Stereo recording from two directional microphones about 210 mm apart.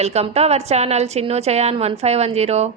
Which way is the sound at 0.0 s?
30° right (ahead or behind).